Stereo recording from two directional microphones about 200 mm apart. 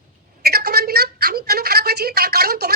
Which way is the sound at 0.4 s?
50° right (ahead or behind).